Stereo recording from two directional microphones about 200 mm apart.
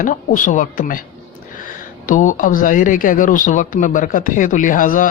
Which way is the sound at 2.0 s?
40° left (ahead or behind).